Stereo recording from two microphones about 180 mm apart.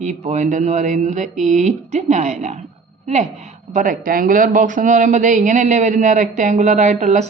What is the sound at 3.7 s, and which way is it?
Speech, 50° right (ahead or behind).